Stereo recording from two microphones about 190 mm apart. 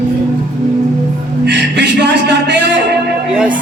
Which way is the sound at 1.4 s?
65° right (ahead or behind).